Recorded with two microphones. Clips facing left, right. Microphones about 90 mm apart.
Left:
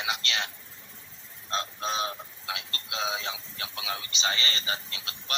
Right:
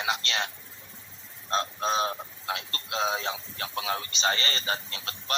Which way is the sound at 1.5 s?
35° right (ahead or behind).